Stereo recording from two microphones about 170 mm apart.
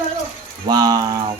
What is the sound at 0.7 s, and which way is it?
Speech, 25° right (ahead or behind).